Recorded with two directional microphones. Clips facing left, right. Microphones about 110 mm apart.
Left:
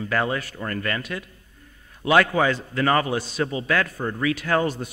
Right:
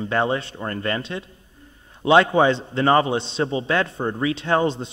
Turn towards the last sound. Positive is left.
turn(degrees=-25)  # may be behind; listen again after turning